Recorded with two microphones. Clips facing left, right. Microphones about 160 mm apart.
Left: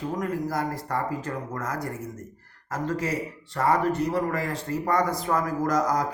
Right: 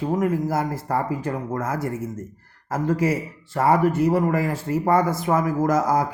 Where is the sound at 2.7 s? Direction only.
10° right (ahead or behind).